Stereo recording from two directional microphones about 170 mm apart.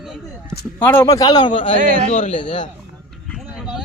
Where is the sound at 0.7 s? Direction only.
10° left (ahead or behind); by 1.8 s 30° left (ahead or behind).